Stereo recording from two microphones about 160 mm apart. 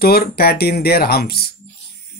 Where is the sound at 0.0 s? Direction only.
75° left (ahead or behind).